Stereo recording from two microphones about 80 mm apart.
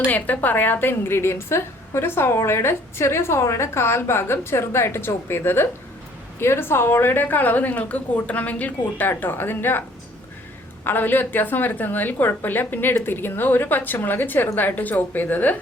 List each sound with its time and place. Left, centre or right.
0.1 s a woman's voice: left
10.8 s a woman's voice: left